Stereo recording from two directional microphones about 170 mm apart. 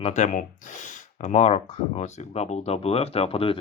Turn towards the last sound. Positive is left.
turn(degrees=35)  # may be behind; listen again after turning